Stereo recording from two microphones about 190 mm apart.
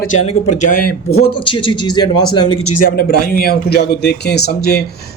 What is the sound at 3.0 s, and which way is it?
A man's voice, 55° left (ahead or behind).